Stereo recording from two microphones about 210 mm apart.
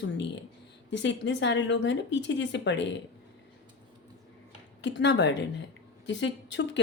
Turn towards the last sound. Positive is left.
turn(degrees=55)  # may be behind; listen again after turning